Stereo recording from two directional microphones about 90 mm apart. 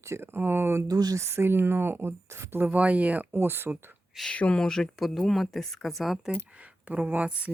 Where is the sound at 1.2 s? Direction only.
30° right (ahead or behind).